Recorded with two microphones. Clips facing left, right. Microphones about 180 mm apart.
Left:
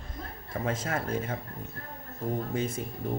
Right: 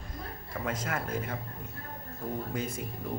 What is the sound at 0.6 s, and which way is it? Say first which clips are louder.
Speech: left 3 dB; 25° left (ahead or behind).